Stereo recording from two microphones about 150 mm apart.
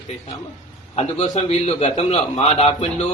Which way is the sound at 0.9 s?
45° left (ahead or behind).